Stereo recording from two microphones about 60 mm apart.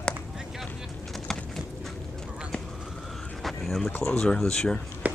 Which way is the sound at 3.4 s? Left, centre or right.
Centre.